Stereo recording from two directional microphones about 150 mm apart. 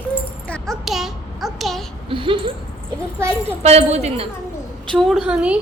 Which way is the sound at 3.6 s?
45° right (ahead or behind).